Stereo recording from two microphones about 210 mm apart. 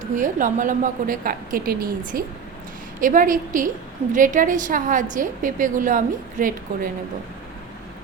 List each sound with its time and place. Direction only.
0.0 s a woman's voice: 40° right (ahead or behind)